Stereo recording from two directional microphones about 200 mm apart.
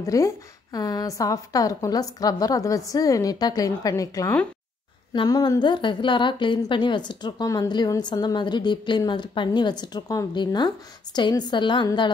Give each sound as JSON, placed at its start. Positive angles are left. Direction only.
{"t": 0.0, "sound": "a woman's voice", "side_deg": 15}